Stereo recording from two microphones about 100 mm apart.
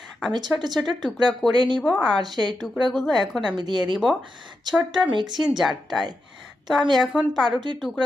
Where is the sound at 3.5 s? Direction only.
45° right (ahead or behind).